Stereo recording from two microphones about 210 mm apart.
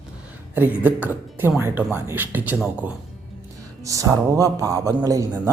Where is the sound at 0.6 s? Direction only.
10° right (ahead or behind).